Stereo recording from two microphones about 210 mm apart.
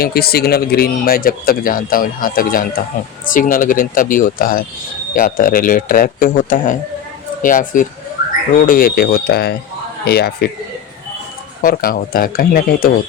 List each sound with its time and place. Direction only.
0.0 s speech: 45° left (ahead or behind)
11.6 s speech: 45° left (ahead or behind)